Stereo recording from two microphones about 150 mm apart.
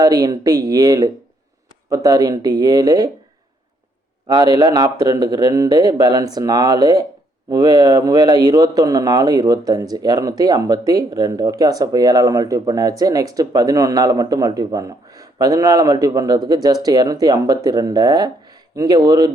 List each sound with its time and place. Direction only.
0.0 s a man's voice: 25° right (ahead or behind)
4.3 s a man's voice: 25° right (ahead or behind)